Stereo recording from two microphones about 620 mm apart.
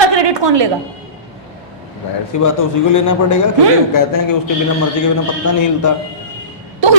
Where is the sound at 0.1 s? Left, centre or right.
Right.